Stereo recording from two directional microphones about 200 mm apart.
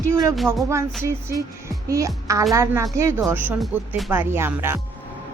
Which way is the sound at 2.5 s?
15° right (ahead or behind).